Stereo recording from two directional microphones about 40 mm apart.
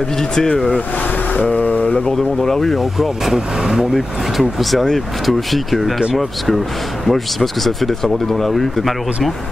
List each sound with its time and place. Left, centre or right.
0.4 s speech: centre
1.3 s speech: left
2.1 s speech: centre
3.3 s speech: centre
3.9 s speech: centre